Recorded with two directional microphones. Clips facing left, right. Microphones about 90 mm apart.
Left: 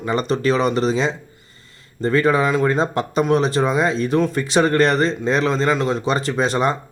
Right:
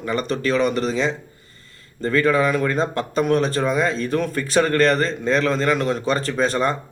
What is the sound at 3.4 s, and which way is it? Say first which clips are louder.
A man's voice: left 2 dB; 15° left (ahead or behind).